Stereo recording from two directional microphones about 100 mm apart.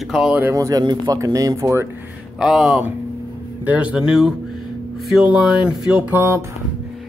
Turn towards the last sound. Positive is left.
turn(degrees=-20)  # may be behind; listen again after turning